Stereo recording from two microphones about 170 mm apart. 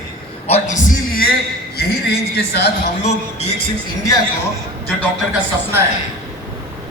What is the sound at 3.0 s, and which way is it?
Speech, 40° left (ahead or behind).